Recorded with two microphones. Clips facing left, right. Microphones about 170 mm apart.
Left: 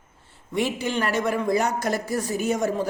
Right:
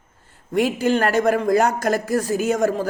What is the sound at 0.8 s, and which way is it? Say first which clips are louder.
Speech: right 7 dB; 45° right (ahead or behind).